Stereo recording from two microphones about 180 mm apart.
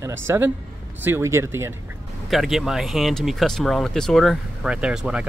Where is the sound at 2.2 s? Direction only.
Centre (ahead or behind).